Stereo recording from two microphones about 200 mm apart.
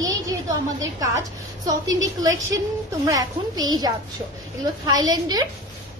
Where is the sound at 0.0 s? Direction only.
15° right (ahead or behind).